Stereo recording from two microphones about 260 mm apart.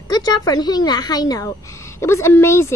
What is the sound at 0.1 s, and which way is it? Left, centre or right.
Speech, centre.